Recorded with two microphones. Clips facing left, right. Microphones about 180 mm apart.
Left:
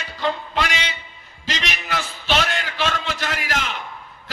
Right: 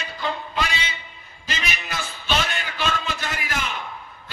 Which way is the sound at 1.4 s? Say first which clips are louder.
Left 3 dB; 85° left.